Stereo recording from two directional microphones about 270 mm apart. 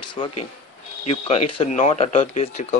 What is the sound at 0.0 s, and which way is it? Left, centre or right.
Speech, centre.